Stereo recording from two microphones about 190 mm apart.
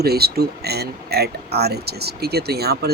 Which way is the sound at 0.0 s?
55° right (ahead or behind).